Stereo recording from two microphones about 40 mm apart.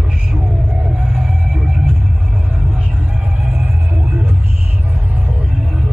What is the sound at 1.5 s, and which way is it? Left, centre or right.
Music, centre.